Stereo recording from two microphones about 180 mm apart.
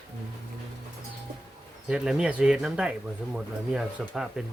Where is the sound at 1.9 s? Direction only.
5° right (ahead or behind).